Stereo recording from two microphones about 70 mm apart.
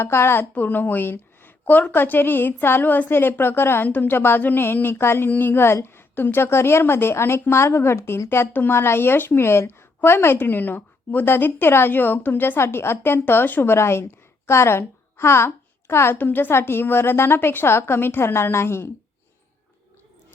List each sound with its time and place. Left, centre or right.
0.0 s a woman's voice: left